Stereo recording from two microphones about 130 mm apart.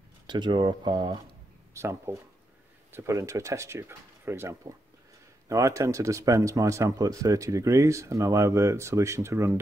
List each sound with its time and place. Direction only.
0.3 s speech: 35° right (ahead or behind)
1.7 s speech: 20° right (ahead or behind)